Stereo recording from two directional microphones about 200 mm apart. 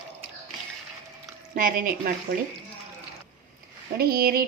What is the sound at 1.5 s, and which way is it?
Speech, 45° right (ahead or behind).